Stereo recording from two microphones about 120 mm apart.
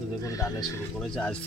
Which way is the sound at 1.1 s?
10° left (ahead or behind).